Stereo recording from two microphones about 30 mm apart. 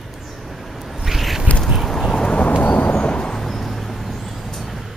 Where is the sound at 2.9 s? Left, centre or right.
Left.